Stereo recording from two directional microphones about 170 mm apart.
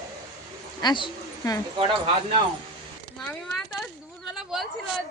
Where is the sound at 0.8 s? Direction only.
25° left (ahead or behind).